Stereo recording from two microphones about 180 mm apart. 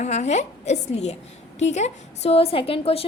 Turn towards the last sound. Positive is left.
turn(degrees=30)  # may be behind; listen again after turning